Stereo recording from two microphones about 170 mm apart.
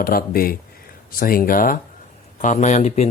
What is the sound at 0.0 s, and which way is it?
Speech, 60° left (ahead or behind).